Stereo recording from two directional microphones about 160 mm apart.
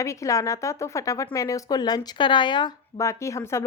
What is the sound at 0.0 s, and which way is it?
A woman's voice, 20° left (ahead or behind).